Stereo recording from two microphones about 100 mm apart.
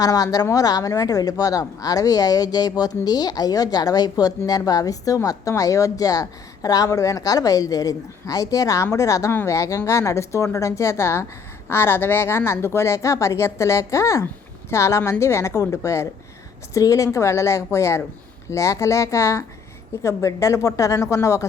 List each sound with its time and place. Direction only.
0.0 s a woman's voice: 40° left (ahead or behind)